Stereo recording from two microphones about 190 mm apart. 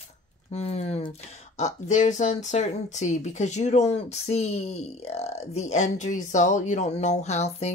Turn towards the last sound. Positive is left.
turn(degrees=35)  # may be behind; listen again after turning